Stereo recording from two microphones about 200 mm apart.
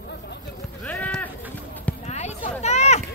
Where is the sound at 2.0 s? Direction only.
35° left (ahead or behind).